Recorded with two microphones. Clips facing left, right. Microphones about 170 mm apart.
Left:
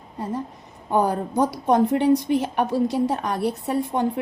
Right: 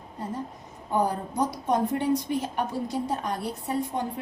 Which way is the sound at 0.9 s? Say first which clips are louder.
Left 5 dB; 75° left (ahead or behind).